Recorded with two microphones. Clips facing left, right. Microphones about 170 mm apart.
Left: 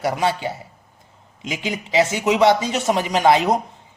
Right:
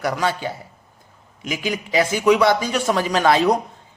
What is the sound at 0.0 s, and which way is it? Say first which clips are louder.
A man's voice: left 1 dB; 25° left (ahead or behind).